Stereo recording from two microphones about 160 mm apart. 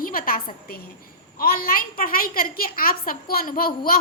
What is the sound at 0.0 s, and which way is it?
A woman's voice, 60° left (ahead or behind).